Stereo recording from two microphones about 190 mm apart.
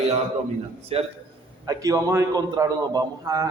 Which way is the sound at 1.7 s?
20° right (ahead or behind).